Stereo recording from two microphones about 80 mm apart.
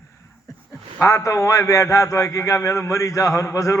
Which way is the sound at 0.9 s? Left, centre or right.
Left.